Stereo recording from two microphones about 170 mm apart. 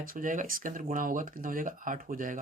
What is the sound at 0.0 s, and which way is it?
Speech, 55° right (ahead or behind).